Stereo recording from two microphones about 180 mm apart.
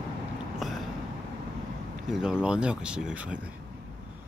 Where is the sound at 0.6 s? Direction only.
Centre (ahead or behind).